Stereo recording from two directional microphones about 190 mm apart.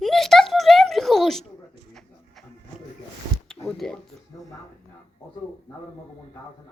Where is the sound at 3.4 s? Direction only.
5° left (ahead or behind).